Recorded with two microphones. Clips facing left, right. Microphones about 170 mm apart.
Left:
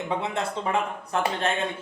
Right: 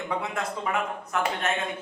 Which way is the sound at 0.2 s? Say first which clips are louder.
Left 2 dB; 30° left (ahead or behind).